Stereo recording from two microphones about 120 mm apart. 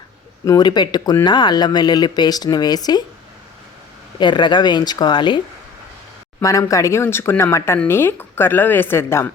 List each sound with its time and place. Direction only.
0.4 s speech: 35° left (ahead or behind)
4.2 s speech: 40° left (ahead or behind)
6.4 s speech: 25° left (ahead or behind)